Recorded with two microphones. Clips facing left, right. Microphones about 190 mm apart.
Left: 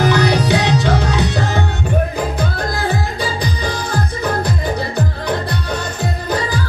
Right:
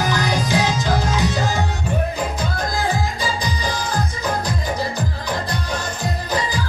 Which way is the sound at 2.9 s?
60° left (ahead or behind).